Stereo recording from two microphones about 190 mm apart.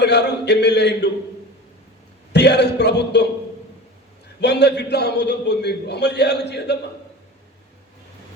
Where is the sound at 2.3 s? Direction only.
60° left (ahead or behind).